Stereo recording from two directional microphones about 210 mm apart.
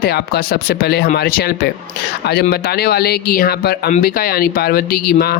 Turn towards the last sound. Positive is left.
turn(degrees=45)  # may be behind; listen again after turning